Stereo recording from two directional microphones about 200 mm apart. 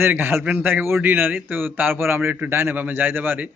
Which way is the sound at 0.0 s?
10° right (ahead or behind).